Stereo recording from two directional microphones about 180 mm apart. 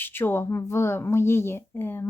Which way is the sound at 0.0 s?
10° left (ahead or behind).